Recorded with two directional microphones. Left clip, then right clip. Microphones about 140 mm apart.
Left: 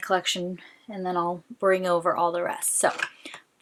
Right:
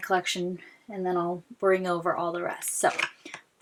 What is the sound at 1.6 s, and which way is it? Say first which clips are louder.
Speech: left 3 dB; 35° left (ahead or behind).